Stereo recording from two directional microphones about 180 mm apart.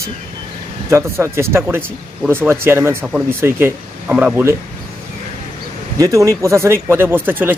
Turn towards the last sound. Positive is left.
turn(degrees=-10)  # may be behind; listen again after turning